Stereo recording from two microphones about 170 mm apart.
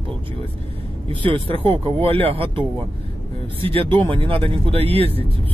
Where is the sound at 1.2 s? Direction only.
30° right (ahead or behind).